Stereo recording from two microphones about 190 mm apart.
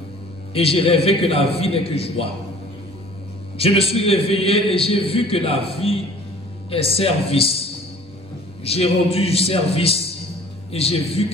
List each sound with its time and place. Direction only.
0.5 s a man's voice: 30° left (ahead or behind)
3.5 s a man's voice: 30° left (ahead or behind)
8.6 s a man's voice: 30° left (ahead or behind)